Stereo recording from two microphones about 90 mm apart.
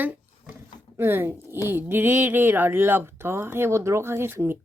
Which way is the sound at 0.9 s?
25° right (ahead or behind).